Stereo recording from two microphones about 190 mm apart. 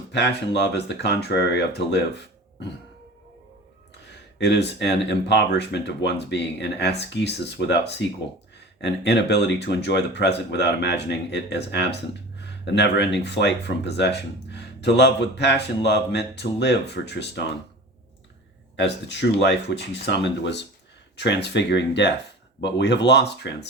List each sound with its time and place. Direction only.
0.1 s speech: 65° left (ahead or behind)
4.1 s speech: 65° left (ahead or behind)
18.8 s speech: 70° left (ahead or behind)